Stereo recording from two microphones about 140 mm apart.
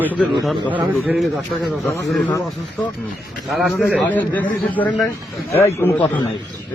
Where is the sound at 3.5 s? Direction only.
Centre (ahead or behind); by 5.9 s 20° left (ahead or behind).